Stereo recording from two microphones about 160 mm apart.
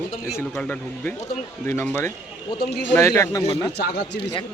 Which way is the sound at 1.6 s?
15° left (ahead or behind).